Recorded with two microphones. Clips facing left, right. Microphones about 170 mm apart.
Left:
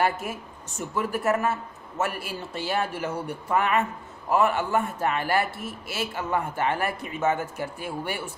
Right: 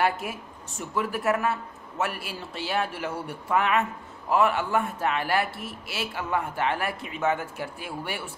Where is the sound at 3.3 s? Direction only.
Centre (ahead or behind).